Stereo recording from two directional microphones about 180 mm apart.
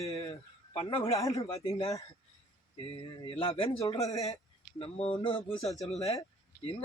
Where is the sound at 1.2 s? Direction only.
20° left (ahead or behind).